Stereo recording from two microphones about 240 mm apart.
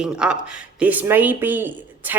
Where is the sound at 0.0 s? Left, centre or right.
Centre.